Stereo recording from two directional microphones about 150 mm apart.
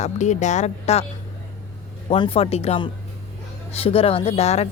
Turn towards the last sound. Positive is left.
turn(degrees=45)  # may be behind; listen again after turning